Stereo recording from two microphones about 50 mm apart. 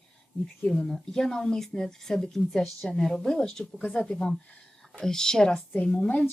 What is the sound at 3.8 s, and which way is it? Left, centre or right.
Speech, left.